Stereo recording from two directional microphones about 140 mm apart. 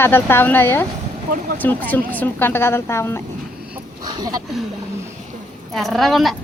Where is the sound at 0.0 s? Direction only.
15° left (ahead or behind).